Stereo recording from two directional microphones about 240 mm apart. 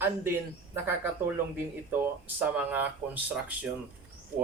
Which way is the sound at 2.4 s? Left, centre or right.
Centre.